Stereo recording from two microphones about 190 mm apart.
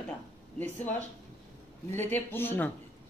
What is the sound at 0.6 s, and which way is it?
Speech, 10° left (ahead or behind).